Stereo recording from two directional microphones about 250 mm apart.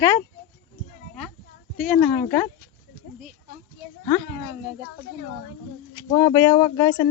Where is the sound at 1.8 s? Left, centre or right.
Centre.